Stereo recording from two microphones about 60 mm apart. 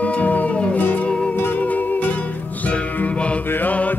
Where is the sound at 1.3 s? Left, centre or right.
Left.